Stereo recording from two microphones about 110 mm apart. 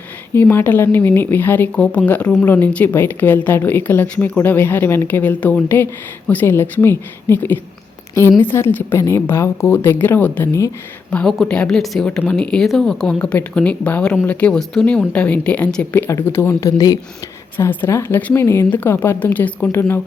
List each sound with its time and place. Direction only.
0.3 s a woman's voice: 20° left (ahead or behind)
16.0 s a woman's voice: 25° left (ahead or behind)
17.6 s a woman's voice: 20° left (ahead or behind)